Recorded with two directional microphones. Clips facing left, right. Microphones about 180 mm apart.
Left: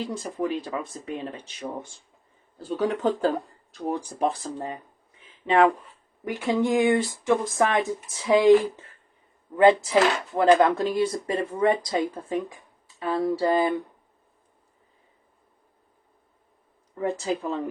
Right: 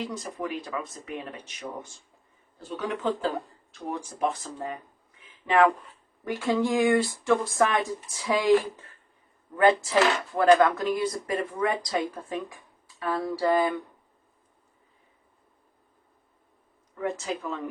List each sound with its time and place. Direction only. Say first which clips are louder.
0.0 s speech: left 4 dB; 30° left (ahead or behind)
9.6 s speech: left 3 dB; 25° left (ahead or behind)
16.9 s speech: left 4 dB; 30° left (ahead or behind)